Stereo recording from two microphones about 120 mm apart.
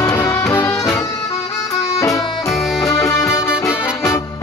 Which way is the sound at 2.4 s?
Centre (ahead or behind).